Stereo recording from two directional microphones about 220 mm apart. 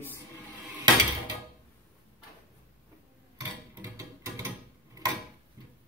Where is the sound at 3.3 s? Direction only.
15° right (ahead or behind).